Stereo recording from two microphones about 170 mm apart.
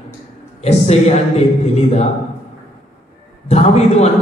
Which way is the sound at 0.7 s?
40° left (ahead or behind).